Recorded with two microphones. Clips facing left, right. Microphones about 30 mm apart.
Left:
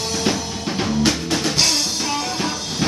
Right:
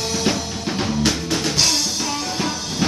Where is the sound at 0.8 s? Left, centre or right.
Centre.